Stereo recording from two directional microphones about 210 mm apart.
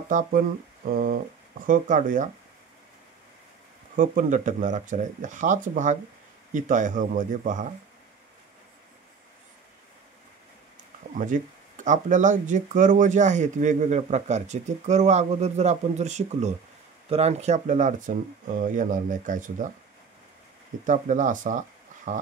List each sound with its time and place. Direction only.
0.8 s a sound: 45° right (ahead or behind)
1.7 s speech: 40° right (ahead or behind)
3.9 s speech: 40° right (ahead or behind)
11.1 s speech: 35° right (ahead or behind)
20.8 s speech: 35° right (ahead or behind)